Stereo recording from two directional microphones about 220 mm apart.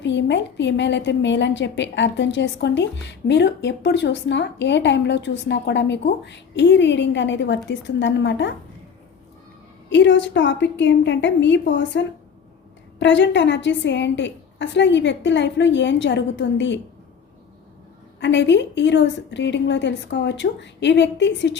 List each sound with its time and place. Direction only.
0.0 s a woman's voice: 55° left (ahead or behind)
9.9 s a woman's voice: 55° left (ahead or behind)
18.2 s a woman's voice: 55° left (ahead or behind)